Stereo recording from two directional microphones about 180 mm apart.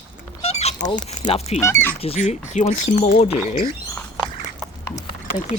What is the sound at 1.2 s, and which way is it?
Speech, 35° left (ahead or behind).